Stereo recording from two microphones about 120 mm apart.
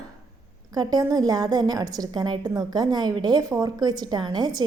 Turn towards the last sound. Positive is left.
turn(degrees=-35)  # may be behind; listen again after turning